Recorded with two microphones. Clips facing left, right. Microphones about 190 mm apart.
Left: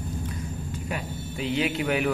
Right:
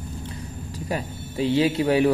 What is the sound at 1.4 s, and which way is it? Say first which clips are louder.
Speech: right 6 dB; 30° right (ahead or behind).